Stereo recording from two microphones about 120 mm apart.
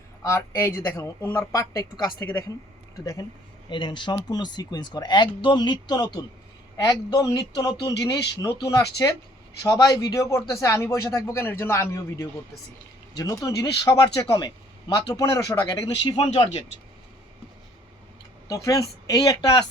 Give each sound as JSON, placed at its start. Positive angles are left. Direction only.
{"t": 0.2, "sound": "speech", "side_deg": 25}
{"t": 3.7, "sound": "speech", "side_deg": 40}
{"t": 7.7, "sound": "speech", "side_deg": 45}
{"t": 8.0, "sound": "speech", "side_deg": 30}
{"t": 16.1, "sound": "speech", "side_deg": 55}
{"t": 18.4, "sound": "speech", "side_deg": 30}